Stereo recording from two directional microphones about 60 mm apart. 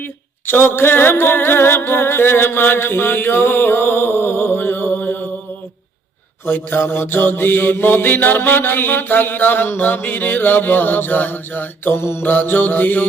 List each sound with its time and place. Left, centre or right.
0.0 s a sound: left
6.4 s mantra: left
12.2 s mantra: left